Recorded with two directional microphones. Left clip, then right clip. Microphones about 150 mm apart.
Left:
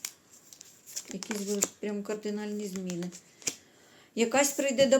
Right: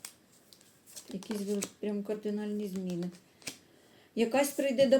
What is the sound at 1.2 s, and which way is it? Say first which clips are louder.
Speech: left 3 dB; 20° left (ahead or behind).